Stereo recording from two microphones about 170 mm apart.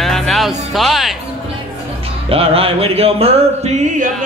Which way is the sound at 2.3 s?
35° right (ahead or behind).